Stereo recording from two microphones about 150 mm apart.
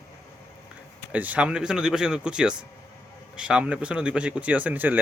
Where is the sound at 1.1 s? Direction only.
10° right (ahead or behind).